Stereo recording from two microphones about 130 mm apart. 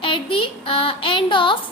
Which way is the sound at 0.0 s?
40° left (ahead or behind).